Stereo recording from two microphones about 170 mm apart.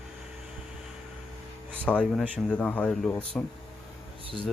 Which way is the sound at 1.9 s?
5° left (ahead or behind).